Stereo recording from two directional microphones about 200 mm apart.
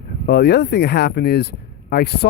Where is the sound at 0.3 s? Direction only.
55° left (ahead or behind).